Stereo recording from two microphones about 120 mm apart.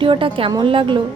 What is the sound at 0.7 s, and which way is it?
Speech, 45° right (ahead or behind).